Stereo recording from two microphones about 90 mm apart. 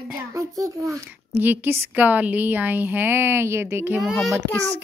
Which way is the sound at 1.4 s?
20° right (ahead or behind).